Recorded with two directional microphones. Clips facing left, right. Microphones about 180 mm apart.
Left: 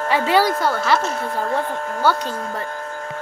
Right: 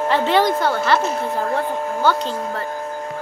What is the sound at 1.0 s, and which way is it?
Speech, 20° right (ahead or behind).